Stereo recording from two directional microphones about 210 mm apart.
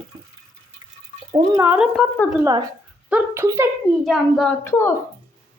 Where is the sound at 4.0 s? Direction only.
Centre (ahead or behind).